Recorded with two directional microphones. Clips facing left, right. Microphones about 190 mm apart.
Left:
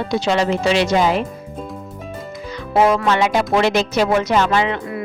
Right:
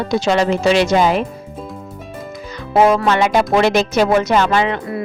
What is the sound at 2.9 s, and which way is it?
Speech, 50° right (ahead or behind).